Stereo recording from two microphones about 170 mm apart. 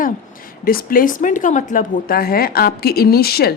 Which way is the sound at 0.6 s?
60° left (ahead or behind).